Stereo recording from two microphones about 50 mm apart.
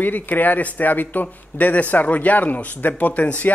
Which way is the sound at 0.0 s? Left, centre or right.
Left.